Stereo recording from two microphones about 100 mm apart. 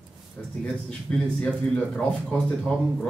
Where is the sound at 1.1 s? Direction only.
5° left (ahead or behind).